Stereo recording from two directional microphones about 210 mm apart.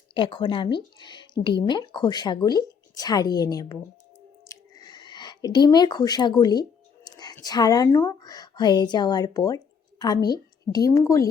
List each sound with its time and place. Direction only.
0.1 s a woman's voice: 25° left (ahead or behind)